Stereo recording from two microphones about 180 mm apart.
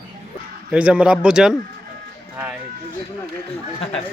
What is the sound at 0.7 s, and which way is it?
Speech, 5° right (ahead or behind).